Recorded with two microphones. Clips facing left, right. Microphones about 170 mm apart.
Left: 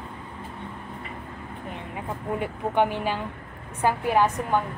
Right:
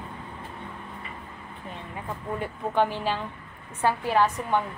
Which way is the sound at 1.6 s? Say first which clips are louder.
Left 2 dB; 15° left (ahead or behind).